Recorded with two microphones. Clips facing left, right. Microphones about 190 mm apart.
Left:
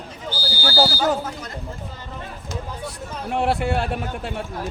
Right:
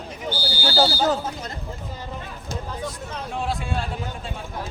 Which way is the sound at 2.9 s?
70° left (ahead or behind).